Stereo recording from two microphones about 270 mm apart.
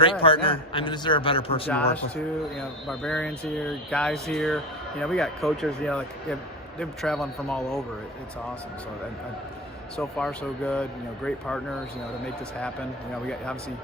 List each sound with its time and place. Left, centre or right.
0.0 s a man's voice: centre
2.8 s speech: centre
10.0 s speech: centre
13.2 s speech: centre